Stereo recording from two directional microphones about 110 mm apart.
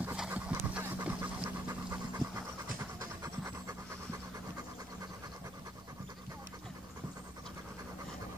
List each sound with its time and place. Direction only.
0.0 s pant: 15° right (ahead or behind)
2.2 s pant: 45° right (ahead or behind)
3.0 s pant: 30° right (ahead or behind)